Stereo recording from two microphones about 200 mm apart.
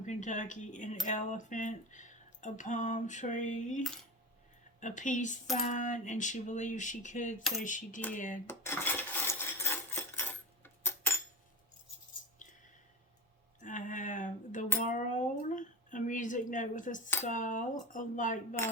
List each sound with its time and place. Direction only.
0.0 s speech: 35° left (ahead or behind)
8.4 s coin: 10° left (ahead or behind)
13.6 s a sound: 40° left (ahead or behind)
17.2 s speech: 40° left (ahead or behind)